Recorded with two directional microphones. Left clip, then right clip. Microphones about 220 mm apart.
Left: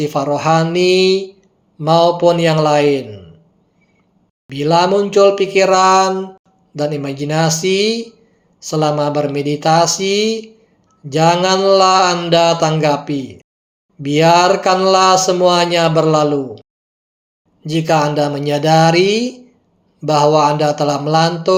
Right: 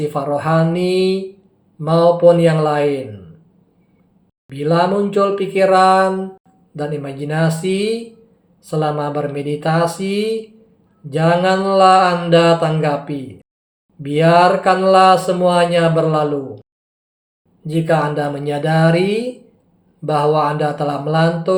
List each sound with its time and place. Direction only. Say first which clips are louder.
0.0 s speech: left 3 dB; 35° left (ahead or behind)
4.4 s speech: left 3 dB; 35° left (ahead or behind)